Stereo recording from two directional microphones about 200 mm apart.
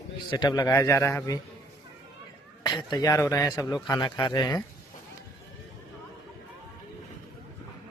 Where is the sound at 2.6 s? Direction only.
20° left (ahead or behind).